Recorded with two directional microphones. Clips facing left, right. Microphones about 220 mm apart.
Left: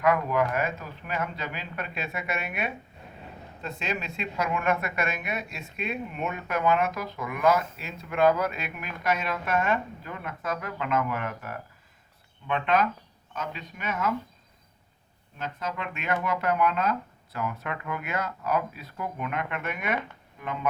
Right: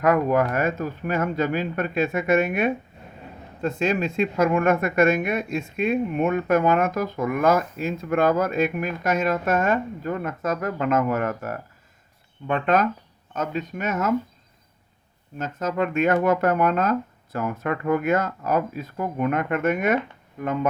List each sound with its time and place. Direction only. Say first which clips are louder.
0.0 s speech: right 5 dB; 45° right (ahead or behind)
15.4 s speech: right 9 dB; 45° right (ahead or behind)